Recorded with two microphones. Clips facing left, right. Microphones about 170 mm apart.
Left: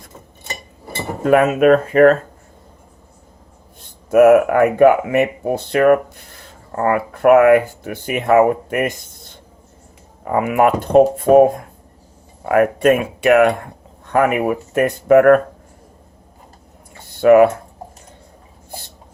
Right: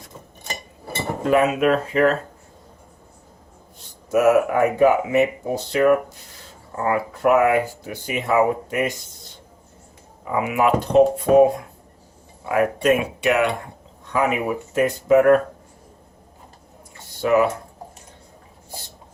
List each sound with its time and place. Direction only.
1.2 s speech: 50° left (ahead or behind)
3.8 s speech: 55° left (ahead or behind)
10.2 s speech: 50° left (ahead or behind)
17.2 s speech: 60° left (ahead or behind)